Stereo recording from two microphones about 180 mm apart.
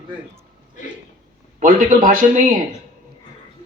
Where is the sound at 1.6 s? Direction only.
45° right (ahead or behind).